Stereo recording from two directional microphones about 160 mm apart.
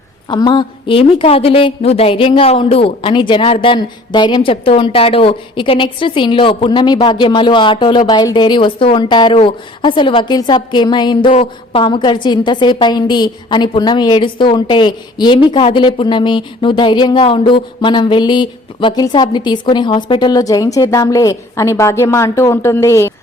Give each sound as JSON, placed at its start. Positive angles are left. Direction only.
{"t": 0.3, "sound": "a woman's voice", "side_deg": 30}